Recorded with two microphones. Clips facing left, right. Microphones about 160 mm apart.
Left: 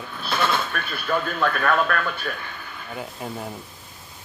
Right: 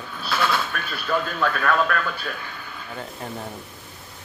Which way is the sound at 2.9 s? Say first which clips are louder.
Left 1 dB; 5° left (ahead or behind).